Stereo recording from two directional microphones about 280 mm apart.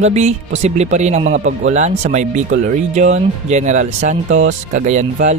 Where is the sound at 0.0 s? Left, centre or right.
Right.